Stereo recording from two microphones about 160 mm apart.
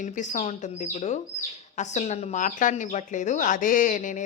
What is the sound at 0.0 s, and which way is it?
Speech, 50° left (ahead or behind).